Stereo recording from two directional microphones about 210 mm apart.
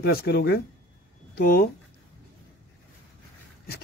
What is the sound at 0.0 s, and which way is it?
Speech, 50° left (ahead or behind).